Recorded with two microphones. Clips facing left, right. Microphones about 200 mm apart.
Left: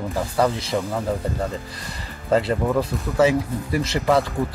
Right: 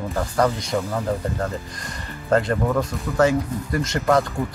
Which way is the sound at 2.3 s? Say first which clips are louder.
Even; 5° left (ahead or behind).